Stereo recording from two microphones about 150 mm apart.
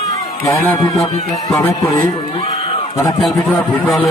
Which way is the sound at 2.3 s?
40° left (ahead or behind).